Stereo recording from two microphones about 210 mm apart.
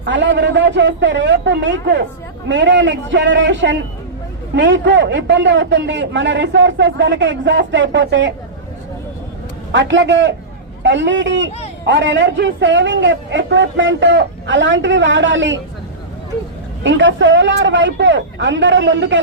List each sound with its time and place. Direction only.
0.0 s a man's voice: 60° right (ahead or behind)
9.7 s a man's voice: 60° right (ahead or behind)
16.8 s a man's voice: 60° right (ahead or behind)